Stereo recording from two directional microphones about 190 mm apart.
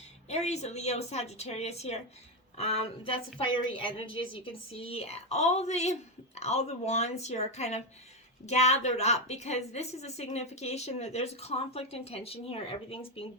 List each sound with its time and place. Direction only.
0.3 s a woman's voice: 35° left (ahead or behind)